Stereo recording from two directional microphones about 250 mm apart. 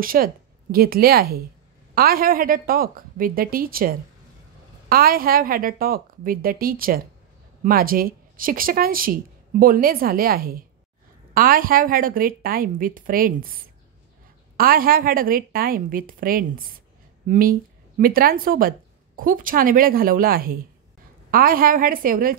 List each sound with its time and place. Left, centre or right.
0.0 s speech: right
14.6 s speech: right